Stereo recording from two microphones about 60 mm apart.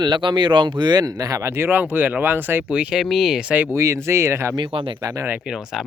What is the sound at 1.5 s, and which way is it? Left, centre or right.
Speech, right.